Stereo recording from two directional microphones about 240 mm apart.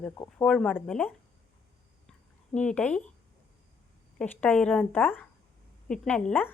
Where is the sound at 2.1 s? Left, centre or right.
Centre.